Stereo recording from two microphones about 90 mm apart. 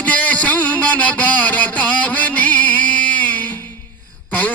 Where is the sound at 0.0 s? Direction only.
15° left (ahead or behind).